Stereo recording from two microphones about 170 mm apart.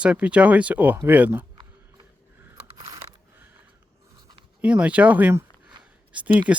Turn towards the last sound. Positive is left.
turn(degrees=-5)  # may be behind; listen again after turning